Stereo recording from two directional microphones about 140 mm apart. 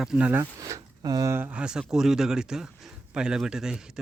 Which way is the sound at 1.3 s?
10° right (ahead or behind).